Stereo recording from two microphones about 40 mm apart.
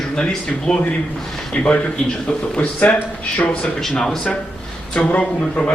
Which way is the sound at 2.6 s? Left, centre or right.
Left.